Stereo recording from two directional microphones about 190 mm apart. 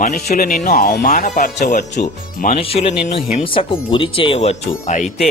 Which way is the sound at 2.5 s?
30° left (ahead or behind).